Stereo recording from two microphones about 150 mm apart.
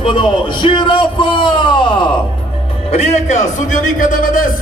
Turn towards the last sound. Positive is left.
turn(degrees=65)  # may be behind; listen again after turning